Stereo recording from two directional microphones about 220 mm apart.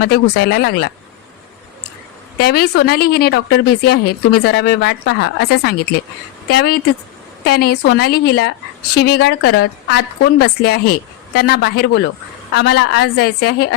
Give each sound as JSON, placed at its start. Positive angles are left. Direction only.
{"t": 0.0, "sound": "speech", "side_deg": 50}
{"t": 2.4, "sound": "speech", "side_deg": 45}